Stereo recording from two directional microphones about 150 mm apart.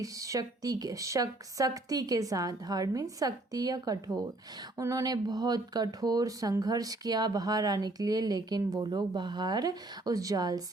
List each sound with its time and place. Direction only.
0.0 s speech: 20° right (ahead or behind)